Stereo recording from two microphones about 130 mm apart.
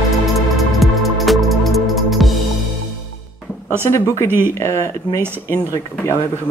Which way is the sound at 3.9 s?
20° left (ahead or behind).